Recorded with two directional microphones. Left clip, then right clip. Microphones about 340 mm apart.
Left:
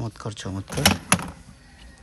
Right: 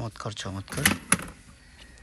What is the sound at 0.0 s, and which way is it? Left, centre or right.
Speech, centre.